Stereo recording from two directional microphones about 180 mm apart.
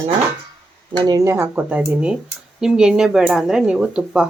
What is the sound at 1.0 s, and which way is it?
Speech, 20° right (ahead or behind).